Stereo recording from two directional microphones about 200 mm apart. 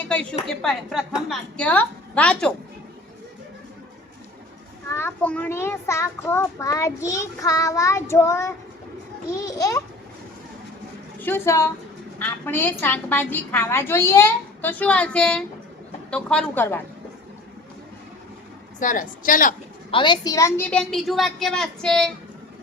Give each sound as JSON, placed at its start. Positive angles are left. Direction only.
{"t": 0.0, "sound": "a woman's voice", "side_deg": 5}
{"t": 4.9, "sound": "a child's voice", "side_deg": 10}
{"t": 11.2, "sound": "a child's voice", "side_deg": 10}
{"t": 18.8, "sound": "a woman's voice", "side_deg": 40}
{"t": 19.9, "sound": "a woman's voice", "side_deg": 25}